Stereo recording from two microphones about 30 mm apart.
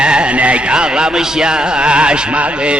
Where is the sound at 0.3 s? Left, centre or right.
Right.